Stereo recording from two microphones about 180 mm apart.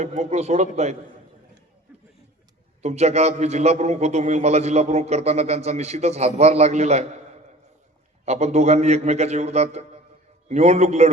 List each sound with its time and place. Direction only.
0.0 s a man's voice: 40° right (ahead or behind)
2.8 s a man's voice: 35° right (ahead or behind)
8.2 s a man's voice: 35° right (ahead or behind)